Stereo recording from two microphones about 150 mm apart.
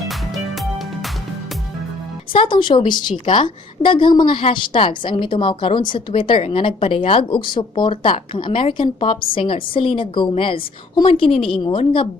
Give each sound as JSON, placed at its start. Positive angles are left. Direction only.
{"t": 0.1, "sound": "music", "side_deg": 0}
{"t": 2.3, "sound": "a woman's voice", "side_deg": 35}